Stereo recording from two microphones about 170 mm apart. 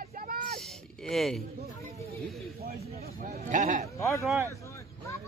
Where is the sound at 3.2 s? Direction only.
50° right (ahead or behind).